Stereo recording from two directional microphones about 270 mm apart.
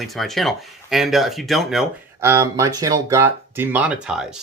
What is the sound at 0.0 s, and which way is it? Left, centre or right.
Speech, centre.